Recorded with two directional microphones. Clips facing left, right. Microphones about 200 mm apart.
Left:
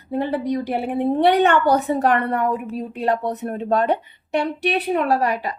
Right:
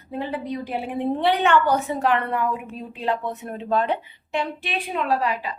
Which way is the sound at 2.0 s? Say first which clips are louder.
Even; 45° left (ahead or behind).